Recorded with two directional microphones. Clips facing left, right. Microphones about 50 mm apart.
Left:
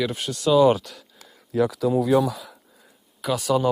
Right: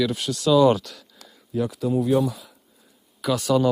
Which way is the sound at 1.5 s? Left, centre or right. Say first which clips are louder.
Left 3 dB; left.